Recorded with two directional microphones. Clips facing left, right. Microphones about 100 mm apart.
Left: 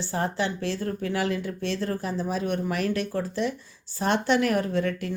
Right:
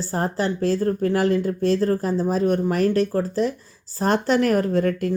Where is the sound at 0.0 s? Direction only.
40° right (ahead or behind).